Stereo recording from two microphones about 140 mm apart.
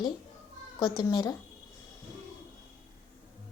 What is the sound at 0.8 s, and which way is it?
Speech, 25° left (ahead or behind).